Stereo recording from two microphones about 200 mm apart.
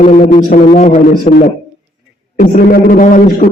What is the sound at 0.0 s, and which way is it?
A man's voice, 40° left (ahead or behind).